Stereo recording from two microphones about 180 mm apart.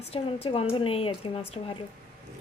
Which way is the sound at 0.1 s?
35° left (ahead or behind).